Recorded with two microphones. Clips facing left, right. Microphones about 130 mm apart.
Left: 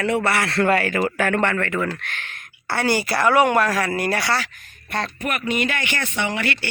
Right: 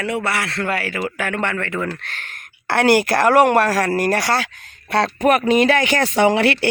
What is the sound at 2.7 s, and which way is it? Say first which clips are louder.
Speech: right 6 dB; 70° right (ahead or behind).